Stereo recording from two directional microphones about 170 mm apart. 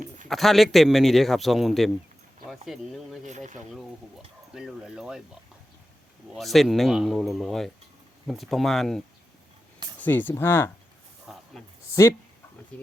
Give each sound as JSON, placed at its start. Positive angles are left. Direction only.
{"t": 0.3, "sound": "a man's voice", "side_deg": 0}
{"t": 3.2, "sound": "speech", "side_deg": -45}
{"t": 4.5, "sound": "a man's voice", "side_deg": -5}
{"t": 6.3, "sound": "a man's voice", "side_deg": 0}
{"t": 11.3, "sound": "snake", "side_deg": -5}
{"t": 12.7, "sound": "speech", "side_deg": 5}